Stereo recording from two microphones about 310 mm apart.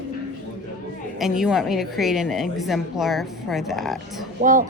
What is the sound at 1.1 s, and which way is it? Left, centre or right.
A woman's voice, centre.